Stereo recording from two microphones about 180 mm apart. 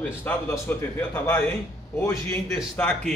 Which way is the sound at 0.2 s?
10° left (ahead or behind).